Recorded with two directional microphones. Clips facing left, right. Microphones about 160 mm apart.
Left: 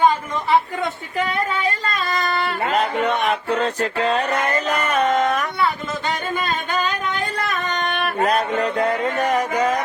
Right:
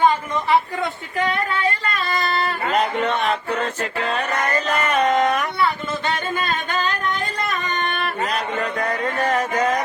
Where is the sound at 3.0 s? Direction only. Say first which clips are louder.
Left 1 dB; 15° left (ahead or behind).